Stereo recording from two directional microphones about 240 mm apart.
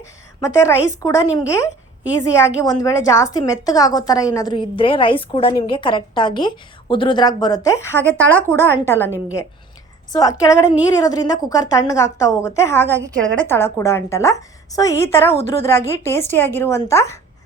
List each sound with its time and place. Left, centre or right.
0.0 s a woman's voice: centre
10.1 s a woman's voice: centre